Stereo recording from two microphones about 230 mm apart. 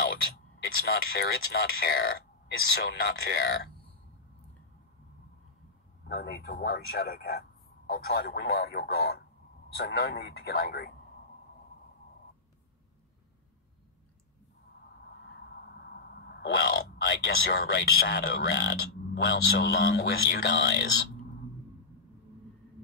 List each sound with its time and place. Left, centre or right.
0.0 s a sound: left
0.8 s a man's voice: left
6.0 s a man's voice: left
15.3 s a man's voice: left